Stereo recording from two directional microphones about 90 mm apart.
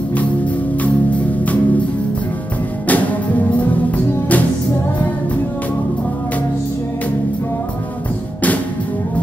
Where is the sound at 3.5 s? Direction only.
15° left (ahead or behind).